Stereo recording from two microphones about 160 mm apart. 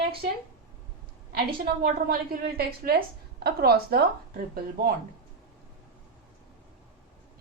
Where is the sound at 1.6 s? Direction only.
70° right (ahead or behind).